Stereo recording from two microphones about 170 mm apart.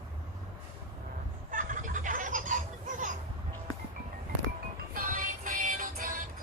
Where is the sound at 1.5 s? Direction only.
50° right (ahead or behind).